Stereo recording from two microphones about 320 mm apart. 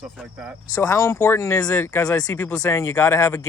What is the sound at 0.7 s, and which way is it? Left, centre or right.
Speech, centre.